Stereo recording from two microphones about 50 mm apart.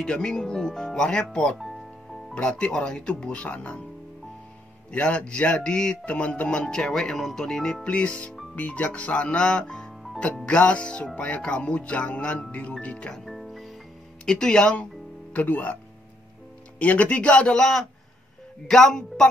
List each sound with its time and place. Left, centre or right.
0.0 s speech: centre
4.9 s speech: left
13.1 s music: centre
14.2 s speech: centre
15.3 s speech: left
16.8 s speech: left
17.6 s speech: centre